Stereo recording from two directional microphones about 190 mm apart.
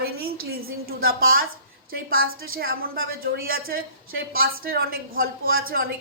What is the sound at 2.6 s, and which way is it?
A woman's voice, 50° right (ahead or behind).